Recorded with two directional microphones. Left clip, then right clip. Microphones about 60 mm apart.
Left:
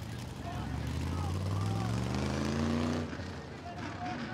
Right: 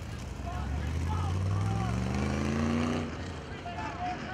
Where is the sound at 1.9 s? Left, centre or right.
Left.